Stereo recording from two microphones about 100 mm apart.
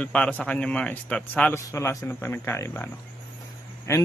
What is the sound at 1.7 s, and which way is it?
A man's voice, 30° left (ahead or behind).